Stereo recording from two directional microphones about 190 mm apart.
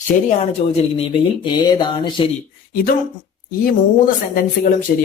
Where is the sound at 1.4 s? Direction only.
25° left (ahead or behind).